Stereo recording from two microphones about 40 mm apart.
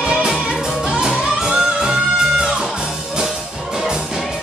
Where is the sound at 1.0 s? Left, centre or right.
Centre.